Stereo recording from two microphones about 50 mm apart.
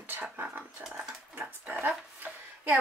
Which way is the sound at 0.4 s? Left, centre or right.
Right.